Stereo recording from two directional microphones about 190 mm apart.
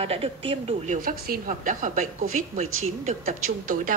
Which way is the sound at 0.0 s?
30° right (ahead or behind).